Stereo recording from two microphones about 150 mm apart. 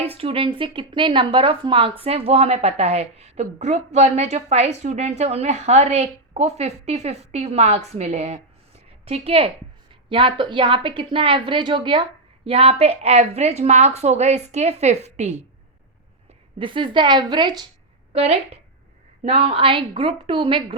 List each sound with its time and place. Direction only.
0.1 s a woman's voice: 40° right (ahead or behind)
16.6 s a woman's voice: 35° right (ahead or behind)
18.1 s a woman's voice: 40° right (ahead or behind)